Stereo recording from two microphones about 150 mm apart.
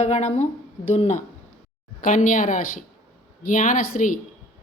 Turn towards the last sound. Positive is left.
turn(degrees=65)  # may be behind; listen again after turning